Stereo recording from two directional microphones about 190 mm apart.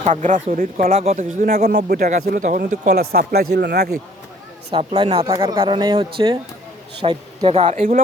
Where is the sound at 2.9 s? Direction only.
55° right (ahead or behind).